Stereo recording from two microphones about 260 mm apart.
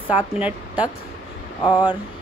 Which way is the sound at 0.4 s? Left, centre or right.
Centre.